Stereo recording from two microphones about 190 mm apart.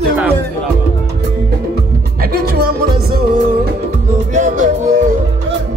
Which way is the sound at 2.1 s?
55° right (ahead or behind).